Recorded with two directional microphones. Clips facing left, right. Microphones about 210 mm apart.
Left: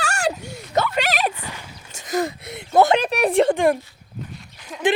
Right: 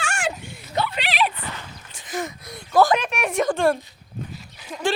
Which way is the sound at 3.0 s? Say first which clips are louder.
Left 6 dB; 35° left (ahead or behind).